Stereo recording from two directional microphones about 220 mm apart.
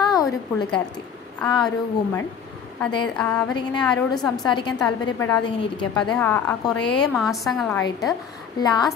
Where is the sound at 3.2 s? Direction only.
5° left (ahead or behind).